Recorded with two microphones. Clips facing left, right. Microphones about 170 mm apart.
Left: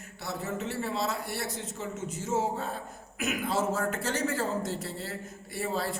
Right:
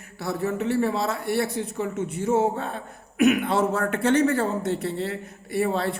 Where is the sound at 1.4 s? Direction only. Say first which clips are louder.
Right 8 dB; 65° right (ahead or behind).